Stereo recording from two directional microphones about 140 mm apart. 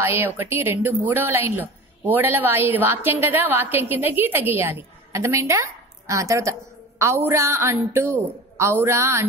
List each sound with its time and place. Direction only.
0.0 s a woman's voice: 15° right (ahead or behind)